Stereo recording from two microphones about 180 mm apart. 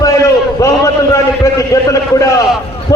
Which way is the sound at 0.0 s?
15° left (ahead or behind).